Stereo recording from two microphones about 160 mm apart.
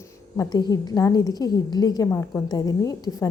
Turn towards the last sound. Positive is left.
turn(degrees=20)  # may be behind; listen again after turning